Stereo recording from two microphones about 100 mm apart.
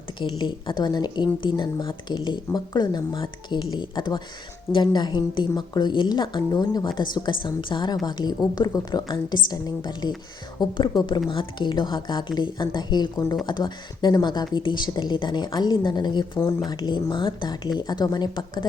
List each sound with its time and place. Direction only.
0.2 s speech: 50° left (ahead or behind)